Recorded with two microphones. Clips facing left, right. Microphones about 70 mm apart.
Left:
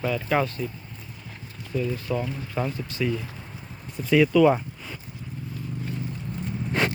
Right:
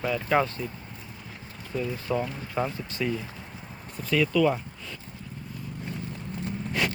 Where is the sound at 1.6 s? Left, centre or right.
Right.